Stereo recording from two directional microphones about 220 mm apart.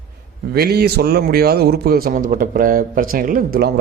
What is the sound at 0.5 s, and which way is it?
A man's voice, 45° right (ahead or behind).